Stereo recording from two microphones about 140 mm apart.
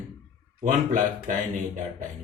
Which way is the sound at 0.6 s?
65° right (ahead or behind).